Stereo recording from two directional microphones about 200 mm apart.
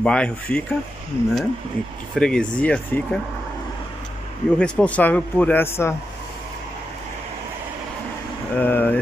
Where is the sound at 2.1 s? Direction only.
5° left (ahead or behind).